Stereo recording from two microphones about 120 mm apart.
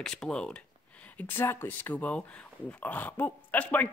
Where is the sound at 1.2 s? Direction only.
20° left (ahead or behind).